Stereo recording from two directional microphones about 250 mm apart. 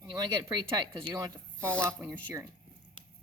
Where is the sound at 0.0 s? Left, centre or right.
Centre.